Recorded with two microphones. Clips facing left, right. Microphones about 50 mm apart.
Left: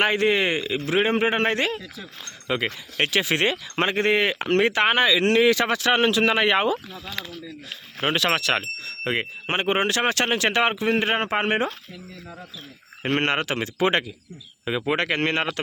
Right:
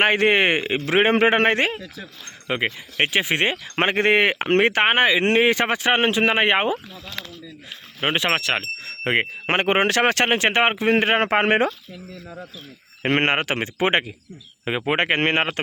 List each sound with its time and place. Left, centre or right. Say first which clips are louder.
0.0 s speech: right 3 dB; right
2.6 s speech: right 2 dB; centre
3.5 s speech: right 2 dB; right
8.0 s speech: right 1 dB; right
8.4 s speech: even; centre
8.8 s speech: right 4 dB; right
13.0 s speech: right 3 dB; right